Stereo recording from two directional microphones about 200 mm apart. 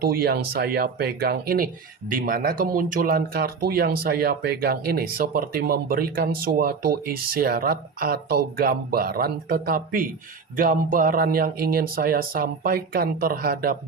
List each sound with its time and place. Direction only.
0.0 s speech: 50° right (ahead or behind)